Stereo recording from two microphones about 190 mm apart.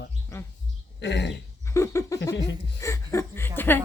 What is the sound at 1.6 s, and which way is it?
Speech, 15° left (ahead or behind).